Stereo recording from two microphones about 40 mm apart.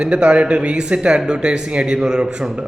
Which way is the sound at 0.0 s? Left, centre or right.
Right.